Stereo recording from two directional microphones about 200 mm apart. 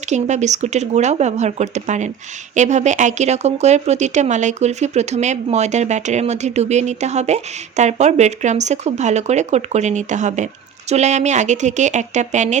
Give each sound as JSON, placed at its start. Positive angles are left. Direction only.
{"t": 0.1, "sound": "speech", "side_deg": -35}